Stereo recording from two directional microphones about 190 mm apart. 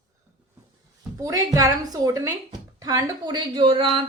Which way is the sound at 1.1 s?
20° right (ahead or behind).